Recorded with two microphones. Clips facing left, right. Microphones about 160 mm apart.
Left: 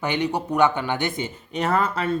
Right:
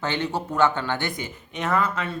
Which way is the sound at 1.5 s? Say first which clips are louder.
Left 2 dB; 35° left (ahead or behind).